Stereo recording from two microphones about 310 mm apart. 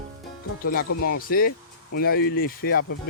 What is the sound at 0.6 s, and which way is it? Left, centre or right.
Speech, left.